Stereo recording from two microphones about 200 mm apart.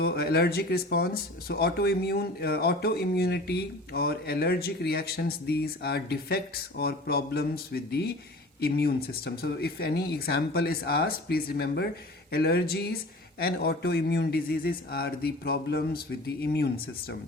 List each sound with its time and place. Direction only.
0.0 s speech: 50° left (ahead or behind)